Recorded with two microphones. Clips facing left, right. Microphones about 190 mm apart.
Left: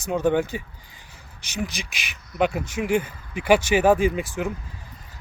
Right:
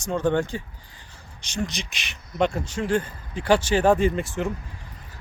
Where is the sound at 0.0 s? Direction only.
10° left (ahead or behind).